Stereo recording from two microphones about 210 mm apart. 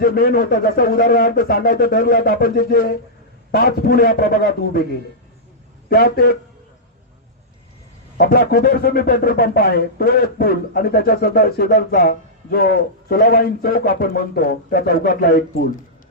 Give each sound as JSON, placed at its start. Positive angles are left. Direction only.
{"t": 0.0, "sound": "speech", "side_deg": 45}
{"t": 5.9, "sound": "speech", "side_deg": 50}
{"t": 8.2, "sound": "speech", "side_deg": 45}